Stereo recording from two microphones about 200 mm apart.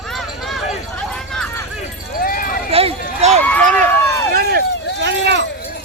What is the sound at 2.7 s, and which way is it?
Run, 30° right (ahead or behind).